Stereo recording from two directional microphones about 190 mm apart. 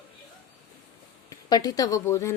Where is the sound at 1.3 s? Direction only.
20° left (ahead or behind).